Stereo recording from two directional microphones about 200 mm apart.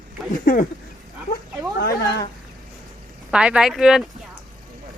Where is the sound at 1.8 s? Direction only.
50° left (ahead or behind).